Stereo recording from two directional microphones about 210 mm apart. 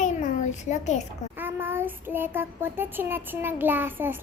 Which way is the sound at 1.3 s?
10° right (ahead or behind).